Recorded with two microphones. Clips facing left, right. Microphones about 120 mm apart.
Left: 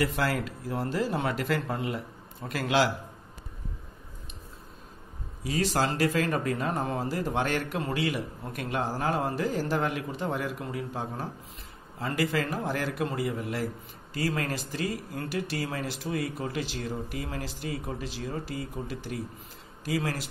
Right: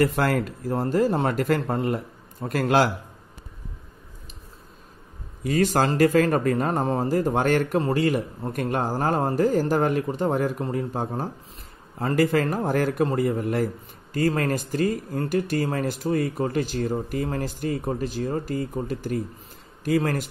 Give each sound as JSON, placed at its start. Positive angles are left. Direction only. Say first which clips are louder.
{"t": 0.0, "sound": "speech", "louder": "right 6 dB", "side_deg": -50}
{"t": 5.4, "sound": "speech", "louder": "right 6 dB", "side_deg": -50}